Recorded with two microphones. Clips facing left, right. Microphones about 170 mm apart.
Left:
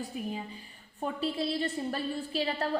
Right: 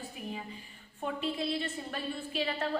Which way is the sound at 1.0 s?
35° left (ahead or behind).